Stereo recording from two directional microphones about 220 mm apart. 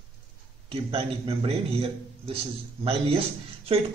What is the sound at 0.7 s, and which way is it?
A man's voice, 25° right (ahead or behind).